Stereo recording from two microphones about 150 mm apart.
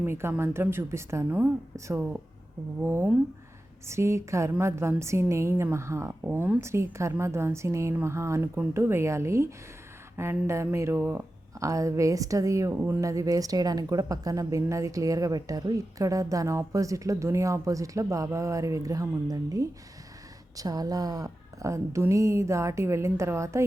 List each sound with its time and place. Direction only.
0.0 s a woman's voice: 15° right (ahead or behind)